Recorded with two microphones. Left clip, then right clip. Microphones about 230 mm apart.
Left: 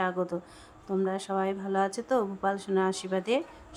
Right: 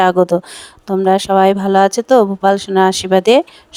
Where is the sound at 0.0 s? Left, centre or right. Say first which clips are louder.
Right 19 dB; right.